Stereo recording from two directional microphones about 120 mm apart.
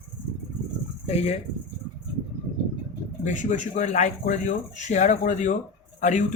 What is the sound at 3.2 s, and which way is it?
A man's voice, 90° left.